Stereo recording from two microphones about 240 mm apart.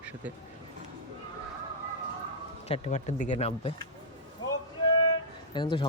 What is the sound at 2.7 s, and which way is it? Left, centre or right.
Speech, left.